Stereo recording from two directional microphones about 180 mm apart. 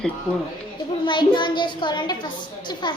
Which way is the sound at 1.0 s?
25° left (ahead or behind).